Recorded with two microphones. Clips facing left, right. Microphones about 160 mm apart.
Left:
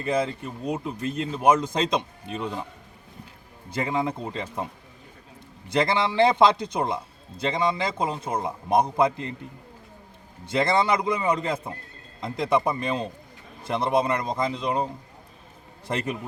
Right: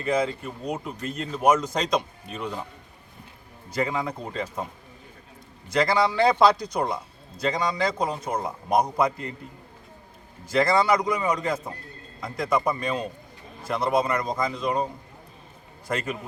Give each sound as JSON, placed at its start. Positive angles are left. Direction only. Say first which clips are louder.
{"t": 0.0, "sound": "a man's voice", "louder": "right 1 dB", "side_deg": 25}
{"t": 3.8, "sound": "a man's voice", "louder": "left 1 dB", "side_deg": 25}
{"t": 5.6, "sound": "a man's voice", "louder": "right 1 dB", "side_deg": 25}
{"t": 10.4, "sound": "a man's voice", "louder": "right 1 dB", "side_deg": 25}